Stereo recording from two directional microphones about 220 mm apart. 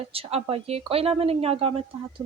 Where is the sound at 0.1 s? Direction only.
25° right (ahead or behind).